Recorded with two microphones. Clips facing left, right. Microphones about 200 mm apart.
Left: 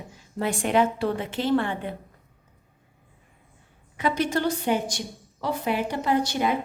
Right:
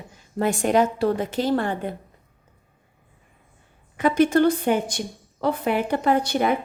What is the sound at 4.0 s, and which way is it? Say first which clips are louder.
A woman's voice: right 7 dB; 50° right (ahead or behind).